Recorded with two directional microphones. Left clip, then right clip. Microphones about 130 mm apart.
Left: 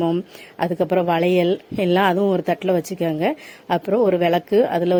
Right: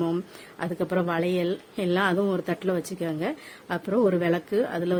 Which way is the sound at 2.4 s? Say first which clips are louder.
Left 8 dB; 30° left (ahead or behind).